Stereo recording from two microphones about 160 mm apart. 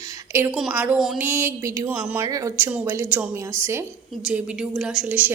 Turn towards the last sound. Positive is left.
turn(degrees=-10)  # may be behind; listen again after turning